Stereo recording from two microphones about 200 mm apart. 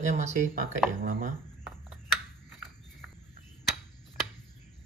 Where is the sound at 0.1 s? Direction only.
40° right (ahead or behind).